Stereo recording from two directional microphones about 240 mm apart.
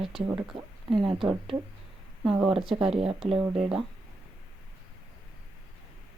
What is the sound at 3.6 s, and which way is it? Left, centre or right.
Speech, centre.